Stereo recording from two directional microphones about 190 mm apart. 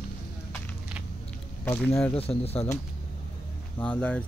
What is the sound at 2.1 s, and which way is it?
Speech, 30° left (ahead or behind).